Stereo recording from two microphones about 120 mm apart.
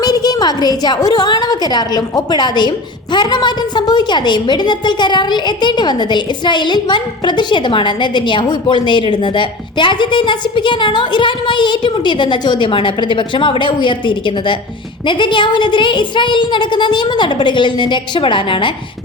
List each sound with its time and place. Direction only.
0.0 s a woman's voice: 35° left (ahead or behind)